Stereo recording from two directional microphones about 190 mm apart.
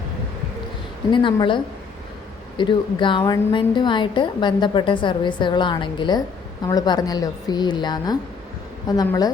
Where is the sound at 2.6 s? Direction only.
25° left (ahead or behind).